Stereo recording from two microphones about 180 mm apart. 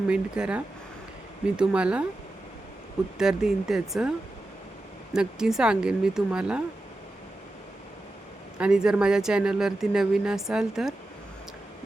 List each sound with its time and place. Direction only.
0.1 s speech: 5° right (ahead or behind)
3.2 s speech: 5° right (ahead or behind)
5.1 s speech: 5° right (ahead or behind)
8.5 s speech: 5° right (ahead or behind)